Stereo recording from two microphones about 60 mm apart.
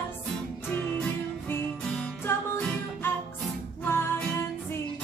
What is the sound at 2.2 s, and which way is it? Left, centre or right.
Music, left.